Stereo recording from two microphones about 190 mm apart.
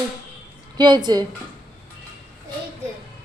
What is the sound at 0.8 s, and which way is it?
Speech, 25° right (ahead or behind).